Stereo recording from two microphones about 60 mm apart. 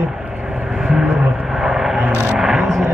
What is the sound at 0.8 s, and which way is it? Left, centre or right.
Vehicle, centre.